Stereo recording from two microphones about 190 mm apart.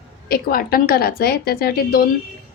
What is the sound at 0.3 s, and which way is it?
Speech, 50° left (ahead or behind).